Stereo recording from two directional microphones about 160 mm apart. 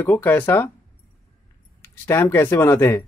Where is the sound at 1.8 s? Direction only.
15° left (ahead or behind).